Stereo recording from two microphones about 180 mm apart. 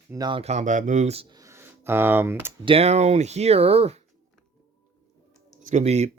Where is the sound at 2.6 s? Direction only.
35° right (ahead or behind).